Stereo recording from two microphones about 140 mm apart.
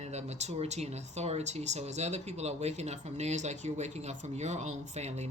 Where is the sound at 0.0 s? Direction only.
50° right (ahead or behind).